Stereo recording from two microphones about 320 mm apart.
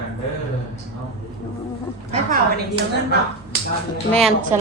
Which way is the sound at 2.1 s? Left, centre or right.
Right.